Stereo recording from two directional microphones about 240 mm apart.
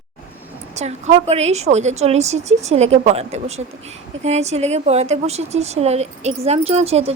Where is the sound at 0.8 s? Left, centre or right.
Right.